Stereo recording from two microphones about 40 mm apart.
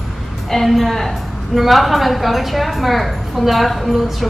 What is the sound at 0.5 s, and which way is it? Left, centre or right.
A woman's voice, centre.